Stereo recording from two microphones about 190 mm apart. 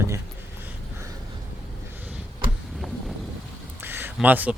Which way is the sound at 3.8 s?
10° right (ahead or behind).